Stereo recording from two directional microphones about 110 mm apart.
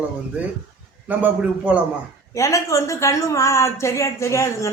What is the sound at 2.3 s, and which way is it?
Speech, 30° left (ahead or behind).